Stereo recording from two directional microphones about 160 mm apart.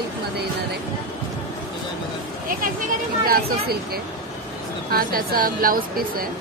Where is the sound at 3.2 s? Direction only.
70° right (ahead or behind).